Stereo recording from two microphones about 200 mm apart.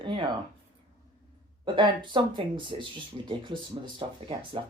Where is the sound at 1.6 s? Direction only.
25° right (ahead or behind).